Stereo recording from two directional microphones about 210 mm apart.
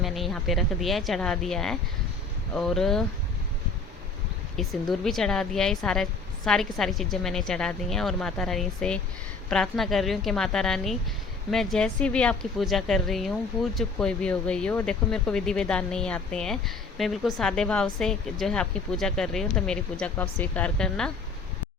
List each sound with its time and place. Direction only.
0.0 s speech: centre (ahead or behind)
4.5 s speech: centre (ahead or behind)